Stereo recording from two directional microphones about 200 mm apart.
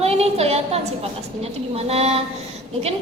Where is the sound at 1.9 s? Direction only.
30° right (ahead or behind).